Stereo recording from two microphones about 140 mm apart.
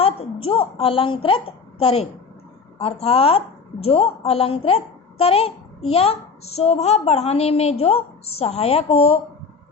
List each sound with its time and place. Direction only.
0.0 s a child's voice: 40° left (ahead or behind)